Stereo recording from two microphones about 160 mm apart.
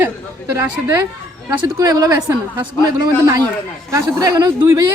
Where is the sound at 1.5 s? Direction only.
25° right (ahead or behind).